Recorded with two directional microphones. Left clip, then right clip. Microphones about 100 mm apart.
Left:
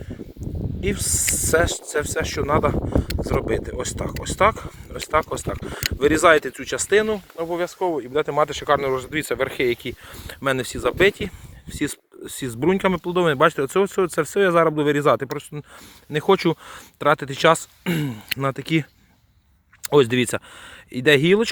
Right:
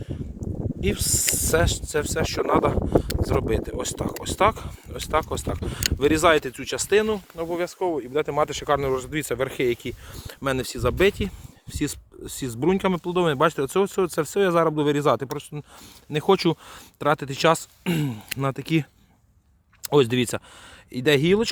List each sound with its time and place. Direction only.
0.8 s speech: 40° right (ahead or behind)
6.2 s speech: 20° right (ahead or behind)
7.0 s speech: 40° right (ahead or behind)
7.5 s speech: 30° right (ahead or behind)
8.4 s speech: 35° right (ahead or behind)
11.7 s speech: 25° right (ahead or behind)
16.2 s speech: 65° right (ahead or behind)
16.6 s speech: 50° right (ahead or behind)
19.9 s speech: 30° right (ahead or behind)
20.1 s speech: 15° right (ahead or behind)